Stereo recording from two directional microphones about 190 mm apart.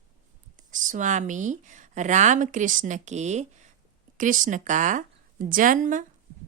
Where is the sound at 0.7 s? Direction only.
45° right (ahead or behind).